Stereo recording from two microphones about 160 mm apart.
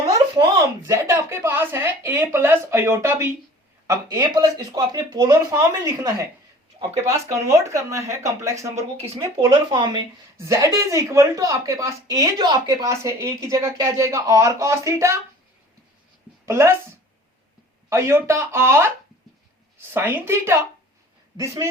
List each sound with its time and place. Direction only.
0.9 s speech: 20° right (ahead or behind)
8.7 s speech: 40° right (ahead or behind)
10.3 s speech: 20° right (ahead or behind)
16.5 s speech: 15° right (ahead or behind)
17.8 s speech: 15° right (ahead or behind)
19.9 s speech: 15° right (ahead or behind)